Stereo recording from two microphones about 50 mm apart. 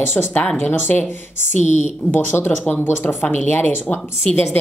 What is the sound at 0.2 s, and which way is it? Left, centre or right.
A woman's voice, left.